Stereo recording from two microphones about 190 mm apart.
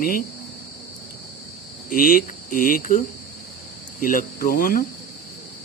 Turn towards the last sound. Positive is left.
turn(degrees=50)  # may be behind; listen again after turning